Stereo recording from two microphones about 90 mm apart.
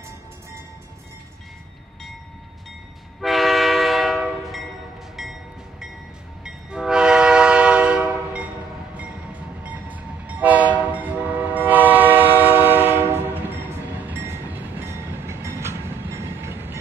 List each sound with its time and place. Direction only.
3.2 s train: centre (ahead or behind)
4.2 s train horn: centre (ahead or behind)
6.4 s train: 5° right (ahead or behind)
9.6 s train: 15° right (ahead or behind)